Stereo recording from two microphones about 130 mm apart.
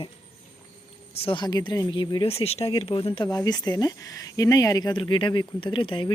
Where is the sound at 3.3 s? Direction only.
30° left (ahead or behind).